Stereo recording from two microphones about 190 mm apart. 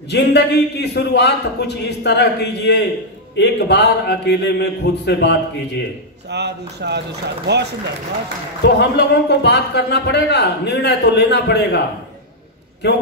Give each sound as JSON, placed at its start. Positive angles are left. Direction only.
{"t": 0.1, "sound": "a man's voice", "side_deg": 60}
{"t": 6.3, "sound": "a man's voice", "side_deg": -60}
{"t": 8.6, "sound": "a man's voice", "side_deg": 60}
{"t": 12.8, "sound": "a man's voice", "side_deg": 60}